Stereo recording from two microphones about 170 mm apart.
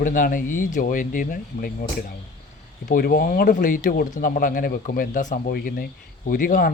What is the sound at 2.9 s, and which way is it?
Speech, 60° left (ahead or behind).